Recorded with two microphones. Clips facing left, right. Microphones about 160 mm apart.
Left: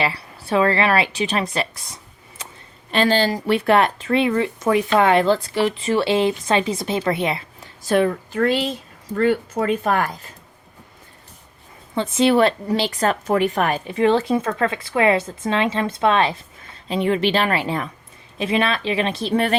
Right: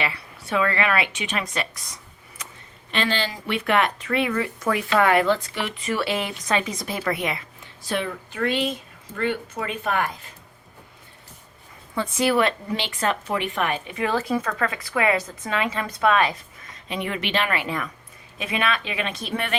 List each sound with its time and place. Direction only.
0.0 s speech: 35° left (ahead or behind)
2.4 s a sound: 30° left (ahead or behind)
2.9 s speech: 40° left (ahead or behind)
7.8 s speech: 45° left (ahead or behind)
11.9 s speech: 25° left (ahead or behind)